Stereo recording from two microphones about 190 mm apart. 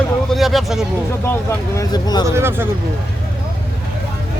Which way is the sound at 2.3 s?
15° right (ahead or behind).